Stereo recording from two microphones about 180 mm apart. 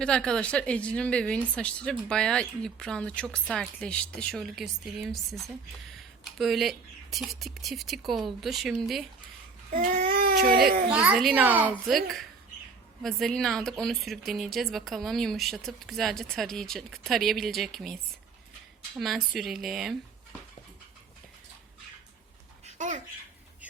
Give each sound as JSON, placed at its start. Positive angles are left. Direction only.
{"t": 0.0, "sound": "a woman's voice", "side_deg": 5}
{"t": 9.7, "sound": "speech", "side_deg": -50}
{"t": 10.9, "sound": "a woman's voice", "side_deg": -5}
{"t": 18.9, "sound": "a woman's voice", "side_deg": 0}
{"t": 22.6, "sound": "a sound", "side_deg": -40}